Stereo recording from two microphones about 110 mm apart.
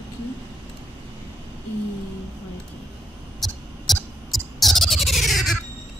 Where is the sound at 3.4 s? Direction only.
Centre (ahead or behind).